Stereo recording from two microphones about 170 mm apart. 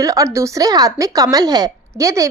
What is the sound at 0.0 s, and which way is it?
A woman's voice, 20° right (ahead or behind).